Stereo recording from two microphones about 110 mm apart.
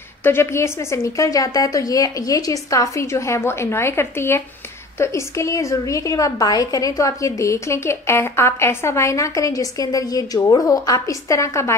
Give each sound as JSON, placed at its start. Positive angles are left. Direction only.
{"t": 0.2, "sound": "a woman's voice", "side_deg": 20}